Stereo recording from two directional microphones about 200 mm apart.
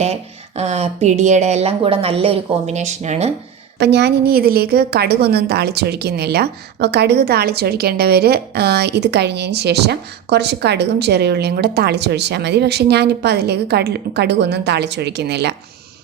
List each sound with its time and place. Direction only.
0.0 s speech: 30° right (ahead or behind)
3.8 s a woman's voice: 55° right (ahead or behind)